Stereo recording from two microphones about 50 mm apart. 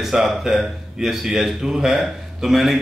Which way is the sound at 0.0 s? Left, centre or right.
Centre.